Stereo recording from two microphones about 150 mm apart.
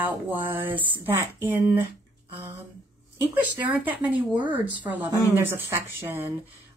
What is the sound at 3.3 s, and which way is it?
Speech, 10° right (ahead or behind).